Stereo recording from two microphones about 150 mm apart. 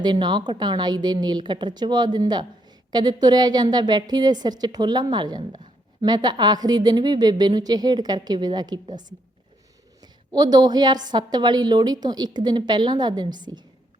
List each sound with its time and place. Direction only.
0.0 s a woman's voice: 30° right (ahead or behind)